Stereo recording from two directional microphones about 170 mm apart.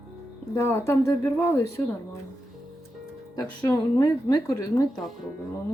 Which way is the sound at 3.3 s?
20° left (ahead or behind).